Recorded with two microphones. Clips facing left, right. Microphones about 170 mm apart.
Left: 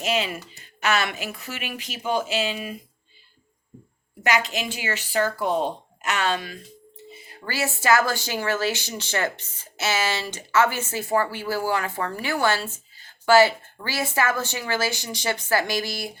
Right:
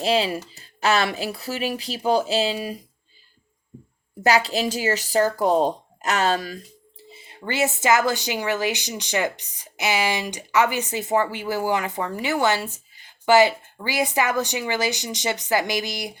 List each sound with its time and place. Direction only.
0.0 s speech: 35° right (ahead or behind)
4.2 s speech: 35° right (ahead or behind)
7.1 s speech: 25° right (ahead or behind)